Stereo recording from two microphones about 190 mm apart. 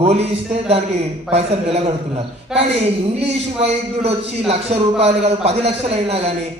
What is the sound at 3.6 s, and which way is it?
A man's voice, 35° right (ahead or behind).